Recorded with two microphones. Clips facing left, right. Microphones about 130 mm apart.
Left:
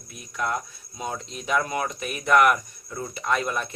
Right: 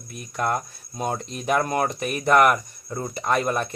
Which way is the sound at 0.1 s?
50° right (ahead or behind).